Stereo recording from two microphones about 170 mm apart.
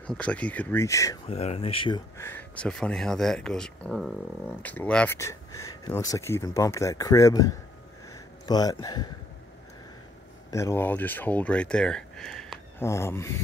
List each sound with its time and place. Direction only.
0.0 s speech: 5° left (ahead or behind)
1.3 s speech: 40° left (ahead or behind)
2.1 s speech: 15° left (ahead or behind)
10.5 s speech: 15° left (ahead or behind)
12.7 s speech: 15° left (ahead or behind)